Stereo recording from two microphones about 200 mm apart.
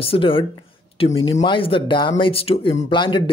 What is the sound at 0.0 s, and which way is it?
Speech, 25° left (ahead or behind).